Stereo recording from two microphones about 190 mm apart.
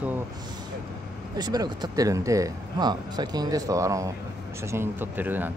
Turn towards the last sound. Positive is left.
turn(degrees=-10)  # may be behind; listen again after turning